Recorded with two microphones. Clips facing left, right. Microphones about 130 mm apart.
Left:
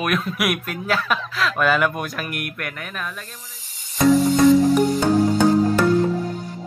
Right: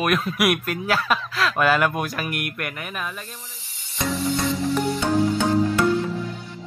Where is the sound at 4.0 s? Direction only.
40° left (ahead or behind).